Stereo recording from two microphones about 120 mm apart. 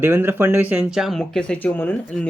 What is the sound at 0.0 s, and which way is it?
Speech, 15° right (ahead or behind).